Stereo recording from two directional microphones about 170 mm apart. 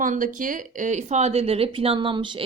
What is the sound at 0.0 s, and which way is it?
Speech, 50° right (ahead or behind).